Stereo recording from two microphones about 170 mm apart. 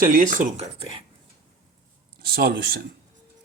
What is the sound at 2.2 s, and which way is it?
Speech, 65° right (ahead or behind).